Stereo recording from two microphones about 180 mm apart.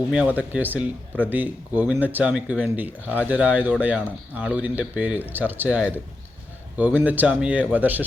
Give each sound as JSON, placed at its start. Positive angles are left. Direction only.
{"t": 0.1, "sound": "speech", "side_deg": -5}